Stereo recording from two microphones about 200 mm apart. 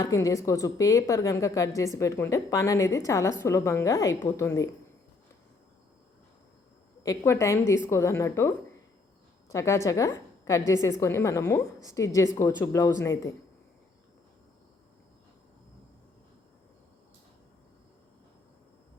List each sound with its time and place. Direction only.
0.0 s a woman's voice: 15° left (ahead or behind)
7.0 s a woman's voice: 15° left (ahead or behind)